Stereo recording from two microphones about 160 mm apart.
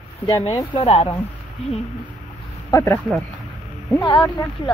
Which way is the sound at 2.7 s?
15° left (ahead or behind).